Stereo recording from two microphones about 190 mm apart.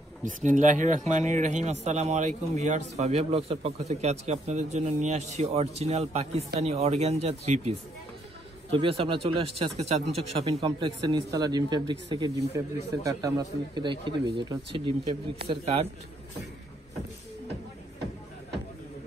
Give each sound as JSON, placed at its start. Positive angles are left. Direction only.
{"t": 0.2, "sound": "speech", "side_deg": -40}
{"t": 8.7, "sound": "speech", "side_deg": -30}